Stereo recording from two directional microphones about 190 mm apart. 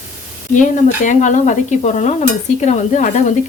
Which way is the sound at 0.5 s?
40° left (ahead or behind).